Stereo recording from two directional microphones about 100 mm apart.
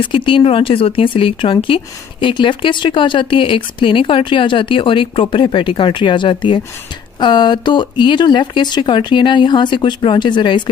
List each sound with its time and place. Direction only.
0.0 s speech: 60° left (ahead or behind)